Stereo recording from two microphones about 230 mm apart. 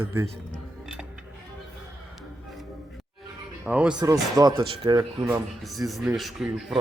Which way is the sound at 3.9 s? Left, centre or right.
Centre.